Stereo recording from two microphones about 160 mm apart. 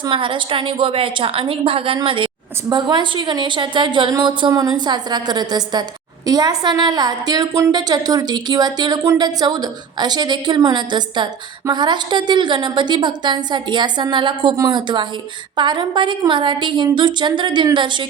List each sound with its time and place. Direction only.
0.0 s a woman's voice: 30° right (ahead or behind)